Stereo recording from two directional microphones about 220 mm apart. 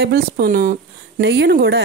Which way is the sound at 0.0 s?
45° right (ahead or behind).